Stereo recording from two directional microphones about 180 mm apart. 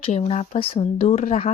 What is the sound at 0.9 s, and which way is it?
Speech, 45° left (ahead or behind).